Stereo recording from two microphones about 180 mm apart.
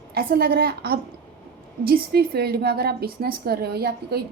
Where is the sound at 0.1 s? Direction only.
60° right (ahead or behind).